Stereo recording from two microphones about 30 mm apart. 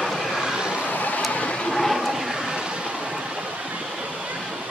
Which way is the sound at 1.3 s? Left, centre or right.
Left.